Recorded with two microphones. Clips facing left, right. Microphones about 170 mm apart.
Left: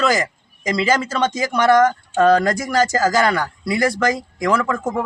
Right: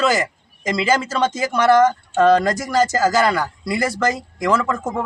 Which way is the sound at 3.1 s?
5° right (ahead or behind).